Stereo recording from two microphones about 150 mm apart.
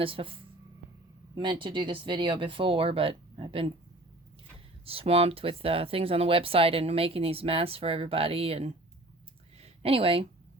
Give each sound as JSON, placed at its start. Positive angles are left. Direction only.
{"t": 0.0, "sound": "speech", "side_deg": -35}
{"t": 4.9, "sound": "speech", "side_deg": -40}
{"t": 9.6, "sound": "a sound", "side_deg": -40}